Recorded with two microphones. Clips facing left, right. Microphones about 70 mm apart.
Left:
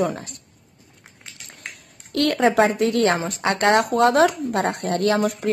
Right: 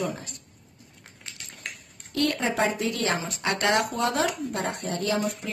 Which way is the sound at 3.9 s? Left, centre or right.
Left.